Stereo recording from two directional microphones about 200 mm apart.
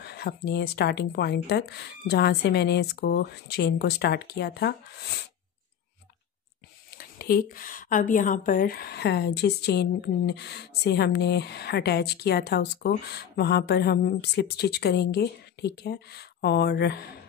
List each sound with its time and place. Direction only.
0.0 s speech: 55° left (ahead or behind)
7.2 s speech: 50° left (ahead or behind)